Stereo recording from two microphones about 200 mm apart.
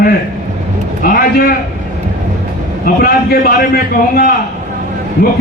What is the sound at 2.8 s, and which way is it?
Speech, 45° left (ahead or behind).